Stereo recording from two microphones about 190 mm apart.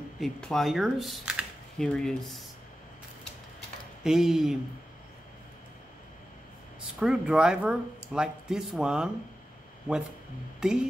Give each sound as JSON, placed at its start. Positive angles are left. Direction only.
{"t": 0.2, "sound": "speech", "side_deg": 0}
{"t": 4.0, "sound": "speech", "side_deg": -5}
{"t": 7.0, "sound": "speech", "side_deg": -5}
{"t": 10.6, "sound": "speech", "side_deg": -5}